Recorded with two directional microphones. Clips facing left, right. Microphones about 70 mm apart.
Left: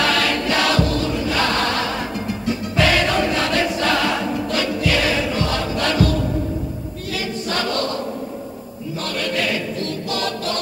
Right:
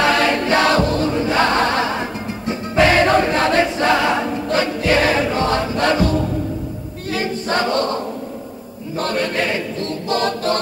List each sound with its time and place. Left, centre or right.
0.0 s choir: right